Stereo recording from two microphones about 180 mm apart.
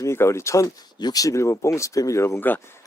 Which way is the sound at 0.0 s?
15° left (ahead or behind).